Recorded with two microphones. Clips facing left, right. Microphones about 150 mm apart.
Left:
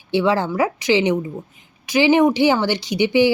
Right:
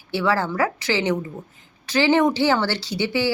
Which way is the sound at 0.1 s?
20° left (ahead or behind).